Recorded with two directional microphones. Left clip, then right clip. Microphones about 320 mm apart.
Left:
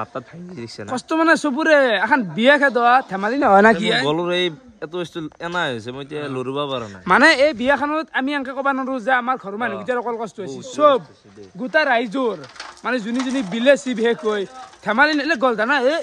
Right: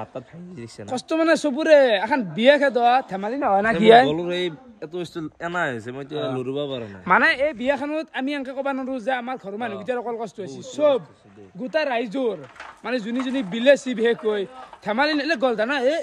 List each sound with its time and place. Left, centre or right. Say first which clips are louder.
0.9 s speech: left 3 dB; centre
3.3 s speech: left 8 dB; left
3.8 s speech: right 7 dB; centre
4.1 s a man's voice: left 5 dB; centre
7.6 s speech: left 5 dB; centre